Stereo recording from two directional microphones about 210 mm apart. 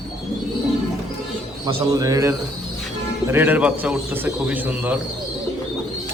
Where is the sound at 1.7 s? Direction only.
15° right (ahead or behind).